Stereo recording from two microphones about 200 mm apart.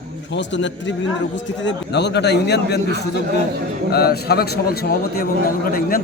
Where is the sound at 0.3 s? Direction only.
65° left (ahead or behind).